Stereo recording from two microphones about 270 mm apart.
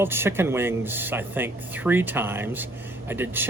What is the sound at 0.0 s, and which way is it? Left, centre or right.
Speech, centre.